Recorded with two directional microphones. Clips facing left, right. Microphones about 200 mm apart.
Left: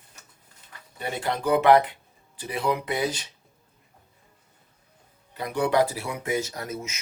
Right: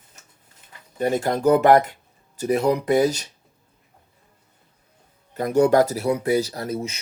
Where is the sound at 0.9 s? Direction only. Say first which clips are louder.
Right 8 dB; 45° right (ahead or behind).